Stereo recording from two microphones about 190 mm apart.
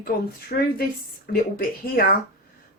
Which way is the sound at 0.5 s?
50° left (ahead or behind).